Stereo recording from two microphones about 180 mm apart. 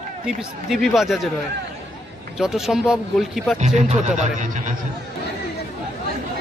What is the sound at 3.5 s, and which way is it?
Speech, 40° right (ahead or behind).